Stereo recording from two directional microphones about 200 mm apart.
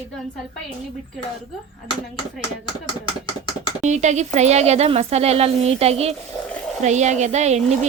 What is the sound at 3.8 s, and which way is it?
Speech, 35° right (ahead or behind).